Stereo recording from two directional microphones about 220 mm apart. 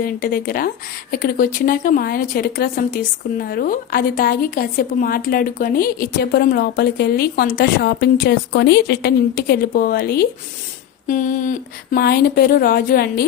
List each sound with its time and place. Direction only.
0.0 s a woman's voice: 40° left (ahead or behind)